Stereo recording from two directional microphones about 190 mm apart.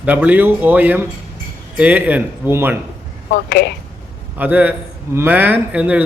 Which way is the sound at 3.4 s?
60° left (ahead or behind).